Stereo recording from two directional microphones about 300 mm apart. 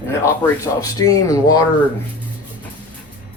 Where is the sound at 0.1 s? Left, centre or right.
Centre.